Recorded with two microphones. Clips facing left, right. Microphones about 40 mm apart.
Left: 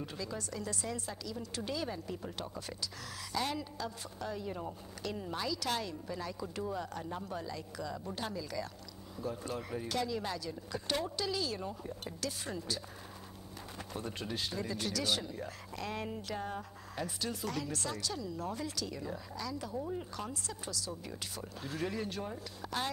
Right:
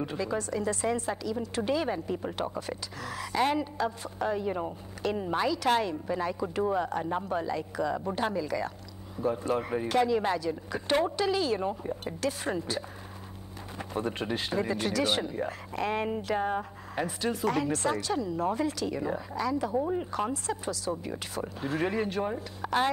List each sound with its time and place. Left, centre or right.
0.0 s a woman's voice: right